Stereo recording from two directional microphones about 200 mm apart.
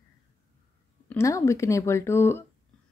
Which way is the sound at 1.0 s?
15° left (ahead or behind).